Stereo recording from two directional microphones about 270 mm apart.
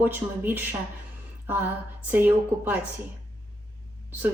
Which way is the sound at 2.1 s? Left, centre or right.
Centre.